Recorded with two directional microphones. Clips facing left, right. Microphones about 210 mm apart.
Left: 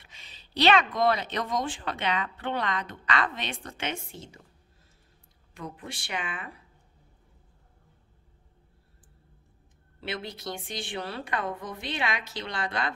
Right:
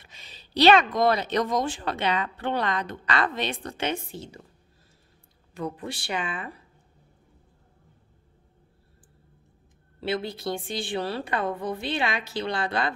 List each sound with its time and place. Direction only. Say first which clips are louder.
0.0 s speech: right 4 dB; 40° right (ahead or behind)
5.5 s speech: right 7 dB; 35° right (ahead or behind)
9.9 s speech: right 7 dB; 30° right (ahead or behind)